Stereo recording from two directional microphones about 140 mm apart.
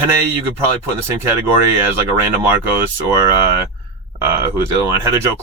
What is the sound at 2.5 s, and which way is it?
Speech, 15° right (ahead or behind).